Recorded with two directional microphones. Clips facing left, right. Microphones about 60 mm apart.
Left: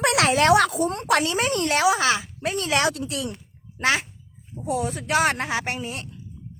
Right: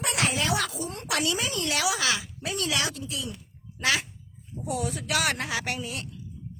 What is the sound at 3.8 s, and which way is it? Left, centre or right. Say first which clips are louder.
Speech: left 4 dB; left.